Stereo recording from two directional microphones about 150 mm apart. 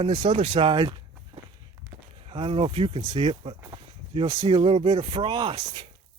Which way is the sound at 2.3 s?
35° right (ahead or behind).